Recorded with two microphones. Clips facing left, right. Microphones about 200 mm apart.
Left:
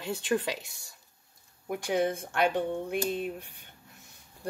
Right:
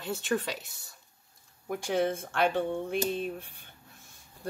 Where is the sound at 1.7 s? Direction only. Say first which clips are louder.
Even; 15° left (ahead or behind).